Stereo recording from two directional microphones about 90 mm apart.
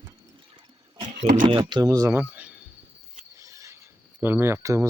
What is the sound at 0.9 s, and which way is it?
Speech, 70° right (ahead or behind).